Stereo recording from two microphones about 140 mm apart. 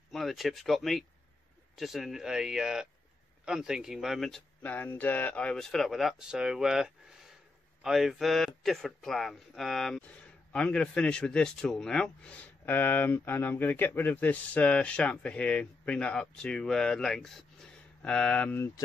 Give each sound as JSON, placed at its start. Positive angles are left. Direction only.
{"t": 0.1, "sound": "speech", "side_deg": 0}
{"t": 4.6, "sound": "speech", "side_deg": 15}